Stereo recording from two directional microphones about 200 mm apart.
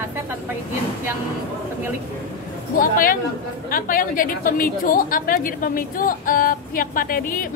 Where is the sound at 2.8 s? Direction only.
45° left (ahead or behind).